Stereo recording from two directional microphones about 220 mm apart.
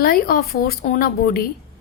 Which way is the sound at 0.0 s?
45° left (ahead or behind).